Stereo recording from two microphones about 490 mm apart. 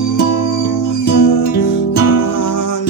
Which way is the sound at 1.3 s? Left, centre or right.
Left.